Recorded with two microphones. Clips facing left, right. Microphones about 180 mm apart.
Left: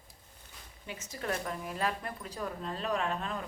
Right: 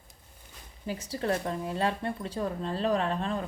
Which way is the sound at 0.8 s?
35° right (ahead or behind).